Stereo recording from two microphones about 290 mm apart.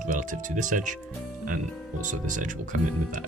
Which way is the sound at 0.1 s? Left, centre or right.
Right.